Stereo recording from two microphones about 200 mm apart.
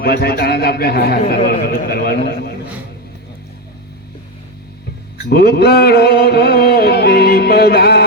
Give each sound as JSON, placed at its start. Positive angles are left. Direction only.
{"t": 0.0, "sound": "music", "side_deg": 50}
{"t": 5.3, "sound": "music", "side_deg": 50}